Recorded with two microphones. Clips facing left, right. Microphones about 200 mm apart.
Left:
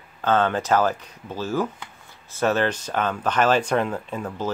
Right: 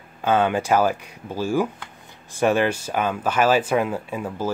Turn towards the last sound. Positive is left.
turn(degrees=-10)  # may be behind; listen again after turning